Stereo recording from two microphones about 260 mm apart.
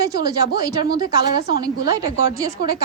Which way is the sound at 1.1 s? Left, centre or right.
Left.